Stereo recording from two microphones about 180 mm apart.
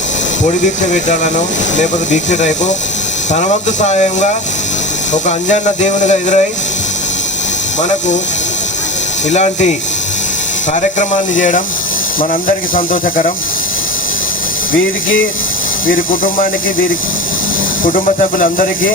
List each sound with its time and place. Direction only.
0.4 s speech: 45° left (ahead or behind)
7.8 s speech: 40° left (ahead or behind)
9.3 s speech: 40° left (ahead or behind)
11.3 s speech: 45° left (ahead or behind)
17.8 s speech: 50° left (ahead or behind)